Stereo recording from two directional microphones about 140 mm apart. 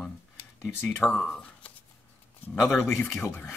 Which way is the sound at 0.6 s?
5° right (ahead or behind).